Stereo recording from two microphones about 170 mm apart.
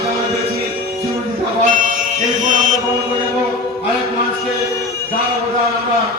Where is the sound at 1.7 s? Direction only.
50° right (ahead or behind).